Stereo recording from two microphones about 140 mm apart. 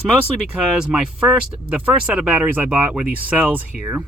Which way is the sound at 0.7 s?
5° right (ahead or behind).